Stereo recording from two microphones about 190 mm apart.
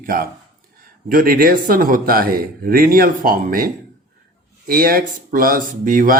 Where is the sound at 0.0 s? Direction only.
45° right (ahead or behind).